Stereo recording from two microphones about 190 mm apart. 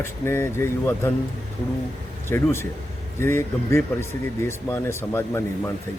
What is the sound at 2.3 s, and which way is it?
Speech, 15° left (ahead or behind).